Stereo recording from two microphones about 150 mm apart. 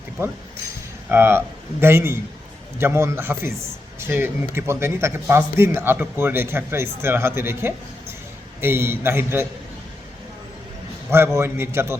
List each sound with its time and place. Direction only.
1.1 s speech: 15° right (ahead or behind)
11.3 s speech: 15° right (ahead or behind)